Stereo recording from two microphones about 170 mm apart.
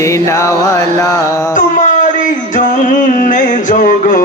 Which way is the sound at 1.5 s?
50° left (ahead or behind).